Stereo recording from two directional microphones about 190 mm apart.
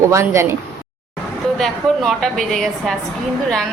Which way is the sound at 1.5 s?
Centre (ahead or behind).